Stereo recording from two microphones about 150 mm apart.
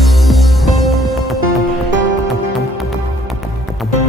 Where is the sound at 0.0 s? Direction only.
Centre (ahead or behind).